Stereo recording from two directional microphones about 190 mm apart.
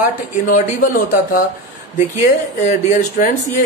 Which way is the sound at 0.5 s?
45° left (ahead or behind).